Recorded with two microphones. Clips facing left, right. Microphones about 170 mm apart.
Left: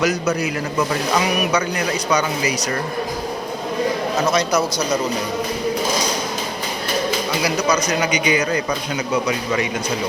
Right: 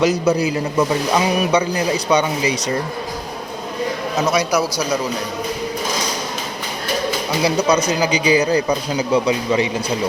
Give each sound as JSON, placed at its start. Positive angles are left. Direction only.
{"t": 0.0, "sound": "speech", "side_deg": -30}
{"t": 4.3, "sound": "a man's voice", "side_deg": -10}
{"t": 7.4, "sound": "speech", "side_deg": -30}